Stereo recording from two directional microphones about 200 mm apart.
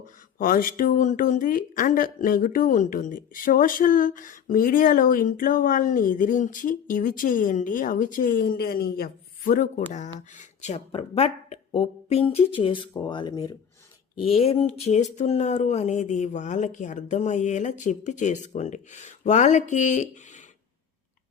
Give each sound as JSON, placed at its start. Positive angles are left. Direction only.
{"t": 0.3, "sound": "speech", "side_deg": 45}
{"t": 14.2, "sound": "speech", "side_deg": 30}